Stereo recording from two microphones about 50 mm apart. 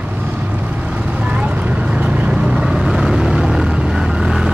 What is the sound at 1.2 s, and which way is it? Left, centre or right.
Vehicle, right.